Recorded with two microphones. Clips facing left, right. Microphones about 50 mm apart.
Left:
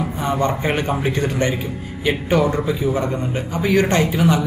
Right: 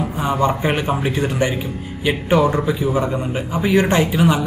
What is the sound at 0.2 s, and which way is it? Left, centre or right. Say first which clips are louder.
A man's voice: right 2 dB; centre.